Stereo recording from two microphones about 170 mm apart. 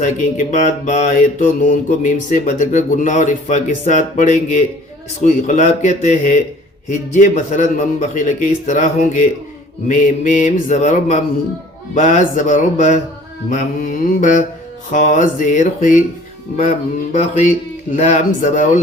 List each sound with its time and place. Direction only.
0.0 s mantra: 45° left (ahead or behind)